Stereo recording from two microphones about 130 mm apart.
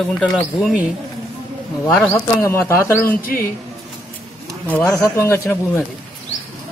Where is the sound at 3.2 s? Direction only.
90° left.